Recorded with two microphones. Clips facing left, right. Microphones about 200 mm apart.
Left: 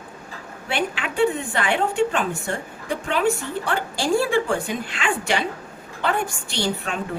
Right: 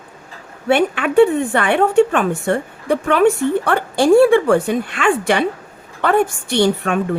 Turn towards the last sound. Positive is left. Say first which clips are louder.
# right 10 dB
turn(degrees=-60)  # may be behind; listen again after turning